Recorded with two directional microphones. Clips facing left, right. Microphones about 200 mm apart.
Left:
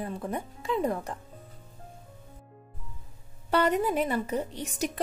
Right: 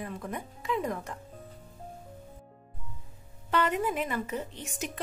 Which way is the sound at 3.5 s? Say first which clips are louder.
Left 3 dB; 40° left (ahead or behind).